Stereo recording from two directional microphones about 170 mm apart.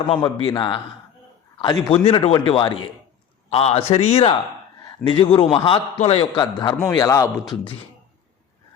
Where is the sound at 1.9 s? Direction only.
35° left (ahead or behind); by 7.4 s 20° left (ahead or behind).